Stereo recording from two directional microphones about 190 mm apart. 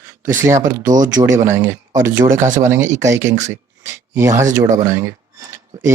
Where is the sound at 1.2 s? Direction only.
15° right (ahead or behind).